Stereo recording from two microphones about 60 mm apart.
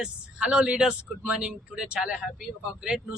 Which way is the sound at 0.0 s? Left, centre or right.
Centre.